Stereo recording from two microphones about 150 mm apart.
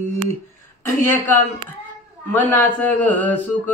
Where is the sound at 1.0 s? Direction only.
15° left (ahead or behind).